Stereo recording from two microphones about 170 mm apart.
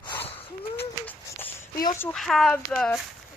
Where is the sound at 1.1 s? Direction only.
10° left (ahead or behind).